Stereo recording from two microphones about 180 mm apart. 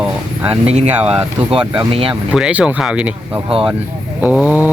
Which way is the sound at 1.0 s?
30° right (ahead or behind).